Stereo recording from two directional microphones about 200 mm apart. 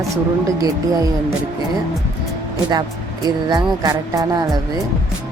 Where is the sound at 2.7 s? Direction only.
20° right (ahead or behind).